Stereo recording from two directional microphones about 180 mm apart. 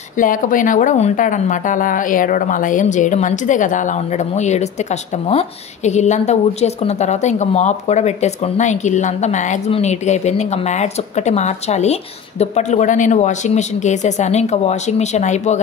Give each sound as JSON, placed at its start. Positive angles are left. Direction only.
{"t": 0.2, "sound": "a woman's voice", "side_deg": 50}